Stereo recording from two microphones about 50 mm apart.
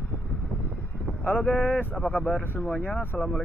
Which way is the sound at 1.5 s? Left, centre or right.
Left.